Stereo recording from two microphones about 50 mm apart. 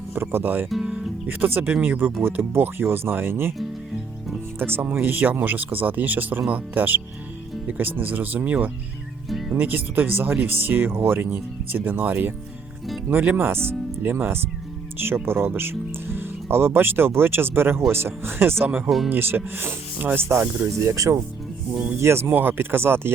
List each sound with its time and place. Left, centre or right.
0.1 s speech: right
4.6 s speech: right
18.6 s speech: right
19.1 s speech: right
20.7 s speech: right
22.0 s speech: right
22.3 s speech: right